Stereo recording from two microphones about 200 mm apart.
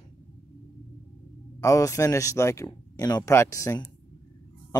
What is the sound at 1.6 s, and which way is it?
Speech, 15° left (ahead or behind).